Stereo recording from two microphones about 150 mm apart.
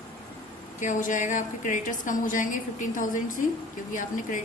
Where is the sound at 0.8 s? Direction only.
55° left (ahead or behind).